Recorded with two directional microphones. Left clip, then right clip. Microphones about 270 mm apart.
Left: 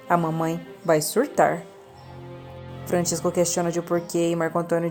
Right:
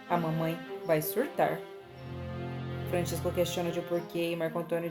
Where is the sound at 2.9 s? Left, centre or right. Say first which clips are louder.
Left 9 dB; left.